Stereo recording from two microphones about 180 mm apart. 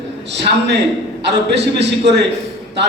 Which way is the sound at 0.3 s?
70° right (ahead or behind).